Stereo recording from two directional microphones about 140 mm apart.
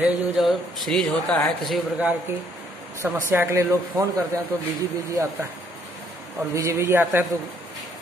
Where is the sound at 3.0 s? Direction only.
15° right (ahead or behind).